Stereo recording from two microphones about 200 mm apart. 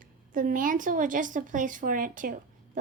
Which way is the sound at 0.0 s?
40° right (ahead or behind).